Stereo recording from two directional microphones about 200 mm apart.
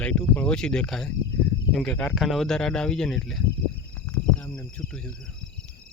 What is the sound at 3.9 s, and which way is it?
Cricket, 10° left (ahead or behind).